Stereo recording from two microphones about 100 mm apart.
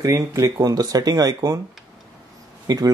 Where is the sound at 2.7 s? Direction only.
40° right (ahead or behind).